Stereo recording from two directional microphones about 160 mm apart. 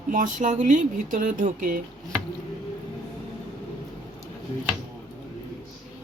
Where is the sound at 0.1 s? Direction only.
55° right (ahead or behind).